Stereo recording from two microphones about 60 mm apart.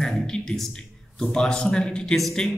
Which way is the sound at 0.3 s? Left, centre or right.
Centre.